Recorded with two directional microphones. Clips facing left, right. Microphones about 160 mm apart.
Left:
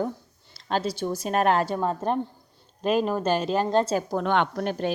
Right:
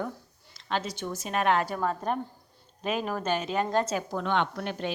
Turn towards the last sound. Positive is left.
turn(degrees=40)  # may be behind; listen again after turning